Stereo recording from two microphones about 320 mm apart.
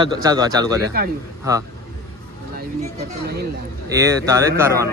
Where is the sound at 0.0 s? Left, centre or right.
Centre.